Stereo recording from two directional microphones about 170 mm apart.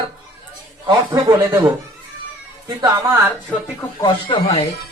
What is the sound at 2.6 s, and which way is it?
Speech, 25° right (ahead or behind).